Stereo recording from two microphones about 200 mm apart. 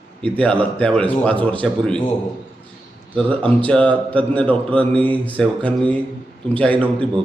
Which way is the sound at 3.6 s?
5° left (ahead or behind).